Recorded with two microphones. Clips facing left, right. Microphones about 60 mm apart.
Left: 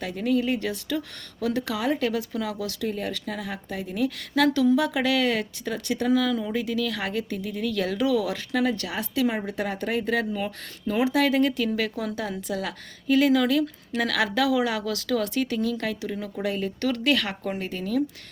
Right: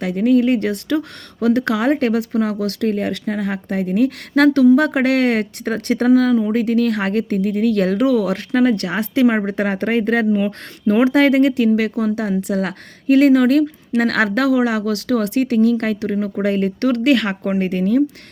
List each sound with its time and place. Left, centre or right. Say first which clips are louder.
0.3 s speech: right 9 dB; right
0.9 s speech: right 9 dB; right
1.5 s speech: right 9 dB; right
8.0 s speech: right 5 dB; right
8.4 s speech: right 9 dB; right
10.8 s speech: right 9 dB; right
11.1 s speech: right 8 dB; right
11.8 s a woman's voice: right 9 dB; centre
12.3 s speech: right 10 dB; right
17.1 s speech: right 8 dB; right
17.6 s speech: right 11 dB; right